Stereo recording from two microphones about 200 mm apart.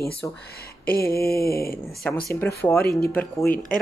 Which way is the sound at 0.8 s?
50° left (ahead or behind).